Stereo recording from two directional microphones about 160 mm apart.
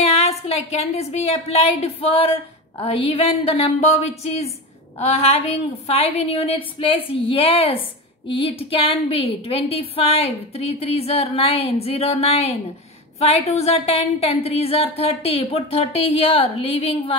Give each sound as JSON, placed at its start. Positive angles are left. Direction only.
{"t": 0.0, "sound": "a woman's voice", "side_deg": 40}